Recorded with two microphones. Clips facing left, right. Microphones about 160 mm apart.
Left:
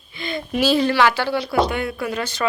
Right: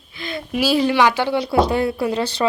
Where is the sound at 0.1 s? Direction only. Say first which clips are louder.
Left 1 dB; centre (ahead or behind).